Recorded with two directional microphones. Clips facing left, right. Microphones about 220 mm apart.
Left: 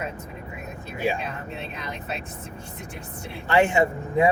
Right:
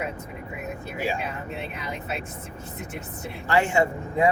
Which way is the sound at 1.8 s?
5° right (ahead or behind).